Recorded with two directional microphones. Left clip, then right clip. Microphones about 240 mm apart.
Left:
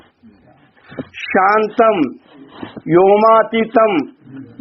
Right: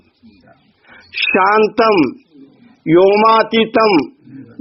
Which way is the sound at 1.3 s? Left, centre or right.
Right.